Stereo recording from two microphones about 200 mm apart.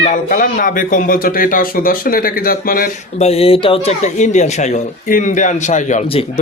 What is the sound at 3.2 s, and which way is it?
Speech, 30° left (ahead or behind).